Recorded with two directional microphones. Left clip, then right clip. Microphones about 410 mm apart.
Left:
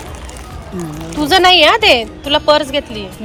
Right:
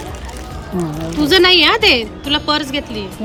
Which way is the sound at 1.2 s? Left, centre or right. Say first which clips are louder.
Left 2 dB; centre.